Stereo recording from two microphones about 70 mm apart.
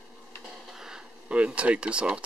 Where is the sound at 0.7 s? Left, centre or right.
Centre.